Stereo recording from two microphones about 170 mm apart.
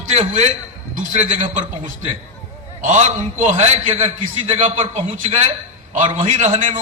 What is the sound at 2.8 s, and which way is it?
A man's voice, 45° right (ahead or behind).